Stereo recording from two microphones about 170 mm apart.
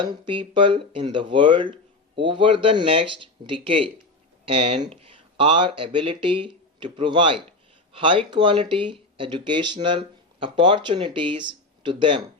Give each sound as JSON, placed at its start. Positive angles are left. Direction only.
{"t": 0.0, "sound": "speech", "side_deg": -30}